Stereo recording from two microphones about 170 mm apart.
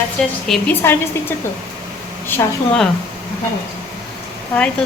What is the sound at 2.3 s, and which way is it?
Speech, 10° left (ahead or behind).